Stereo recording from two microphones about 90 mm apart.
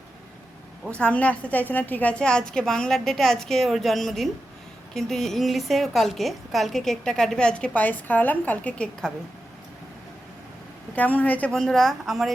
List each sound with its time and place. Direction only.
0.9 s a woman's voice: 15° left (ahead or behind)
10.9 s a woman's voice: 20° left (ahead or behind)
11.5 s a woman's voice: 5° left (ahead or behind)